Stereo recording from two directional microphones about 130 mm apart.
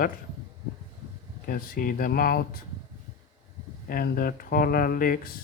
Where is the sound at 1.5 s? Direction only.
90° left.